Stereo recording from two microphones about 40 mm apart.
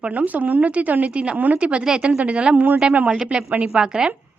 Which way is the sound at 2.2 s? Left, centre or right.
Right.